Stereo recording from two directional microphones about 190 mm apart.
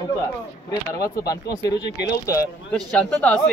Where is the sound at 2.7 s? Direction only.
5° left (ahead or behind).